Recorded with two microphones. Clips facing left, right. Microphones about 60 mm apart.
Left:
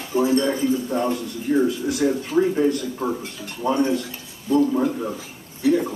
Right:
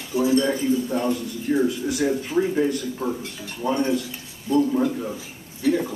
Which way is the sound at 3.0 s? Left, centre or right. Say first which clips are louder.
Left 2 dB; centre.